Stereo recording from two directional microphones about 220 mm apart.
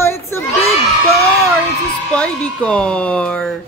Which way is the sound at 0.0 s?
10° left (ahead or behind).